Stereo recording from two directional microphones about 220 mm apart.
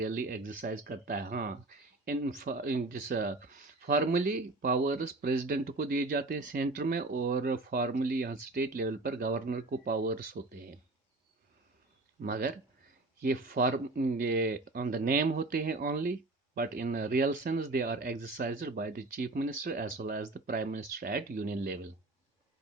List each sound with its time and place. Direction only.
0.0 s speech: 40° right (ahead or behind)
12.2 s speech: 45° right (ahead or behind)